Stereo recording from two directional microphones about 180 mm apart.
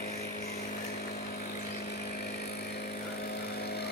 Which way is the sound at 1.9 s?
60° left (ahead or behind).